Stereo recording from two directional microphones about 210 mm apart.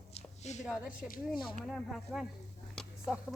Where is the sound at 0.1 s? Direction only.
35° left (ahead or behind).